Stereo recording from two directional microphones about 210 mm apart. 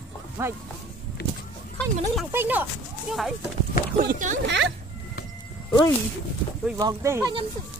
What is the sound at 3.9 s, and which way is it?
Speech, 35° right (ahead or behind).